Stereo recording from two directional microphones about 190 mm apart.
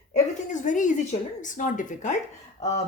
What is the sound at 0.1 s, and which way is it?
A woman's voice, 40° left (ahead or behind).